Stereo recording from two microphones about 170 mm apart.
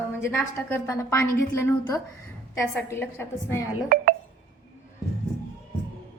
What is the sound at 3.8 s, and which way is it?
Speech, 55° right (ahead or behind).